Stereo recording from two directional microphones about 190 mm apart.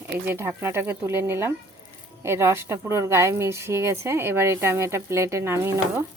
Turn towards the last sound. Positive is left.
turn(degrees=-15)  # may be behind; listen again after turning